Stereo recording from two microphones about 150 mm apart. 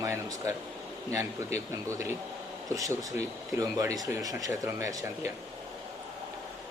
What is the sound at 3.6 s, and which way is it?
Speech, 20° right (ahead or behind).